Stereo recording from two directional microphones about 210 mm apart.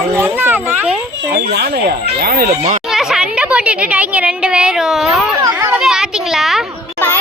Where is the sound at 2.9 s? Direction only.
Centre (ahead or behind).